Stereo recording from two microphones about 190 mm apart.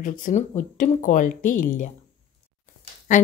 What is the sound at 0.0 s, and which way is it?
Speech, 45° left (ahead or behind).